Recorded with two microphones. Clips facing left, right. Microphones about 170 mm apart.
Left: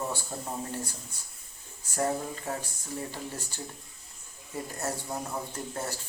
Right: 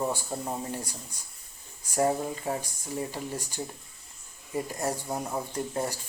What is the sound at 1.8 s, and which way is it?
Speech, 15° right (ahead or behind).